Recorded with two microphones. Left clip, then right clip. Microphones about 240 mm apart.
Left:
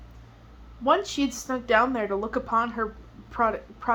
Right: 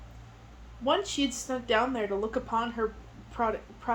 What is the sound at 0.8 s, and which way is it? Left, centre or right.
A woman's voice, left.